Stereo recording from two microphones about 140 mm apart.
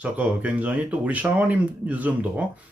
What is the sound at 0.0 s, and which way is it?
Speech, 10° right (ahead or behind).